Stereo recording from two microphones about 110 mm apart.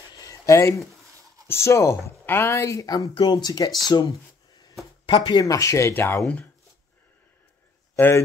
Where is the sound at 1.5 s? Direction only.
25° left (ahead or behind).